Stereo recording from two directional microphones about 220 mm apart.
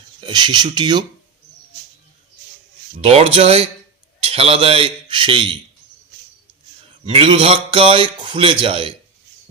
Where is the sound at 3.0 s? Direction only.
25° right (ahead or behind).